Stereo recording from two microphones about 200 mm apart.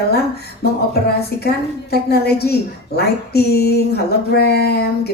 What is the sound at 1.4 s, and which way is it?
A woman's voice, 50° left (ahead or behind).